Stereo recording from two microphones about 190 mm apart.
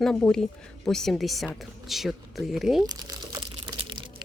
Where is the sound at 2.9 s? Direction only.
20° right (ahead or behind).